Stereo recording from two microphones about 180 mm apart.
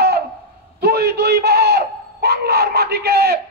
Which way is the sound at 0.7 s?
60° right (ahead or behind).